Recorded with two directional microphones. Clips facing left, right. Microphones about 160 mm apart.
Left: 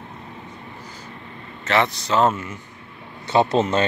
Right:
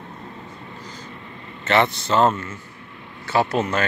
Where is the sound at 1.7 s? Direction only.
Centre (ahead or behind).